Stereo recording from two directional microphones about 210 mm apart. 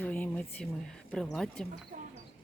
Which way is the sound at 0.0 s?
5° left (ahead or behind).